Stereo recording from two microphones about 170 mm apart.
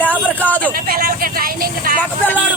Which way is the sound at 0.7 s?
55° right (ahead or behind).